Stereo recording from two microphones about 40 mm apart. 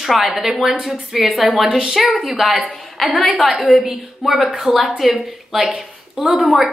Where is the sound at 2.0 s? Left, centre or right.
Centre.